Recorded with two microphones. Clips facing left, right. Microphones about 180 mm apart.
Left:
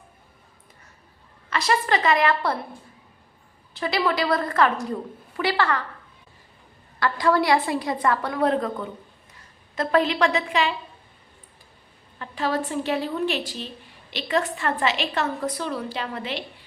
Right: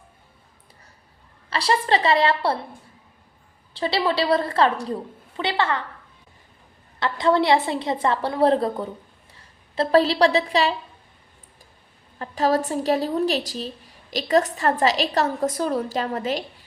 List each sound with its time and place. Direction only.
1.5 s a woman's voice: 30° right (ahead or behind)
3.8 s a woman's voice: 30° right (ahead or behind)
7.0 s a woman's voice: 25° right (ahead or behind)
12.2 s a woman's voice: 40° right (ahead or behind)